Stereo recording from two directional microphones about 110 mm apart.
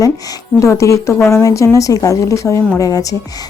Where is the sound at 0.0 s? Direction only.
30° left (ahead or behind).